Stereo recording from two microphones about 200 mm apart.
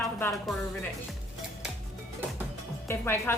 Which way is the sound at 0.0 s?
15° left (ahead or behind).